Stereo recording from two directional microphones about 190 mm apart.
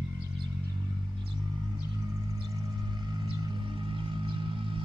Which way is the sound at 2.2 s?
20° right (ahead or behind).